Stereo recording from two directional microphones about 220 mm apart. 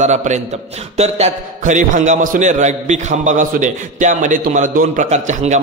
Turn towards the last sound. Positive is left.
turn(degrees=-30)  # may be behind; listen again after turning